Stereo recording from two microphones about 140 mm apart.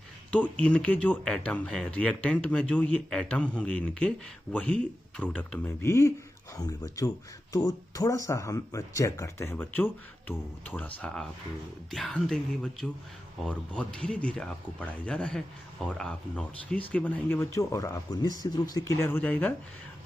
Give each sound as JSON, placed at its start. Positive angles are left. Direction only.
{"t": 0.3, "sound": "speech", "side_deg": 10}